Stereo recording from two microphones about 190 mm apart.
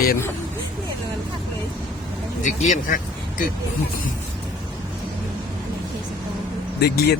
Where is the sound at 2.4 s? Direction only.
40° left (ahead or behind).